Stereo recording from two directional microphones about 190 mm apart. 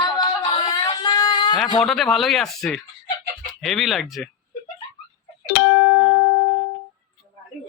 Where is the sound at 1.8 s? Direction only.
Centre (ahead or behind).